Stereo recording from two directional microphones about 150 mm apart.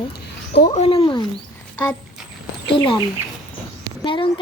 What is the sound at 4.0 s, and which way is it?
Speech, 35° left (ahead or behind).